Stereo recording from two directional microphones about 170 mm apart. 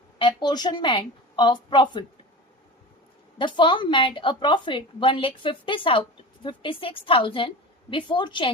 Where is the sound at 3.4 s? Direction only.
30° left (ahead or behind).